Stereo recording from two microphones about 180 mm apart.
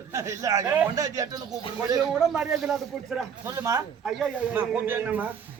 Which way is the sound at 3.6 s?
20° right (ahead or behind).